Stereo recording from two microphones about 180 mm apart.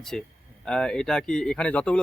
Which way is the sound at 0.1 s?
5° left (ahead or behind).